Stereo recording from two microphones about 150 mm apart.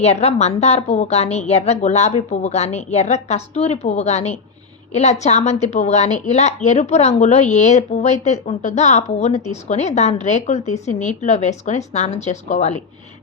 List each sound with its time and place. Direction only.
0.0 s a woman's voice: 45° left (ahead or behind)